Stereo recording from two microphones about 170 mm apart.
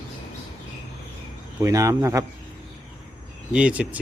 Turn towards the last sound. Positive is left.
turn(degrees=-10)  # may be behind; listen again after turning